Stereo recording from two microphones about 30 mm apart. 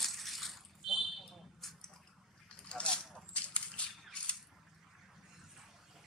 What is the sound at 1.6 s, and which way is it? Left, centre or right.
Drip, centre.